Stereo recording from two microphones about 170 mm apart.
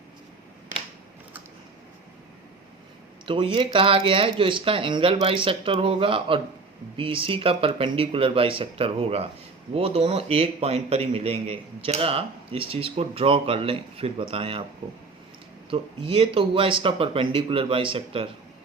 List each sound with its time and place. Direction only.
3.2 s a man's voice: 30° right (ahead or behind)
15.7 s a man's voice: 30° right (ahead or behind)